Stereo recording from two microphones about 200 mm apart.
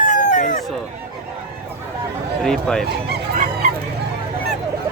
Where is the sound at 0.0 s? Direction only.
40° left (ahead or behind).